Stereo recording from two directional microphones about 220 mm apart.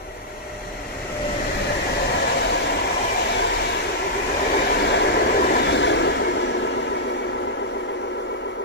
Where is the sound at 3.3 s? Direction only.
50° left (ahead or behind).